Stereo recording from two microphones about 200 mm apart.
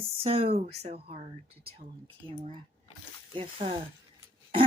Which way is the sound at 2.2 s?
25° right (ahead or behind).